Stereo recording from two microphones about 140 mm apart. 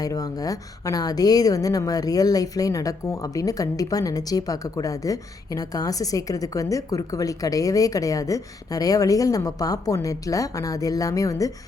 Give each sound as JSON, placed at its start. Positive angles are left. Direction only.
{"t": 0.0, "sound": "a woman's voice", "side_deg": 25}